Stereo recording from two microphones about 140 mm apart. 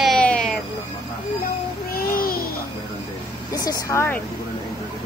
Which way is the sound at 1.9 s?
90° left.